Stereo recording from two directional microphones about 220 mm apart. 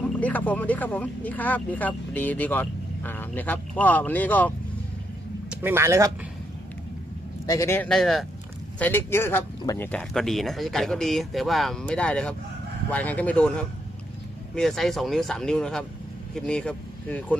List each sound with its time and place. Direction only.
0.2 s speech: 5° left (ahead or behind)
5.5 s speech: 10° right (ahead or behind)
7.4 s speech: 15° left (ahead or behind)